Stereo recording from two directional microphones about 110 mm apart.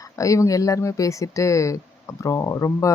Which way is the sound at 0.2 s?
30° left (ahead or behind).